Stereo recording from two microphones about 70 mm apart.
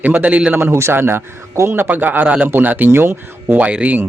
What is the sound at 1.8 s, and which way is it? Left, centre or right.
A man's voice, right.